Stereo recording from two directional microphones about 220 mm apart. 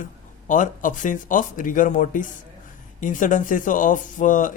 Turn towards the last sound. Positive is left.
turn(degrees=35)  # may be behind; listen again after turning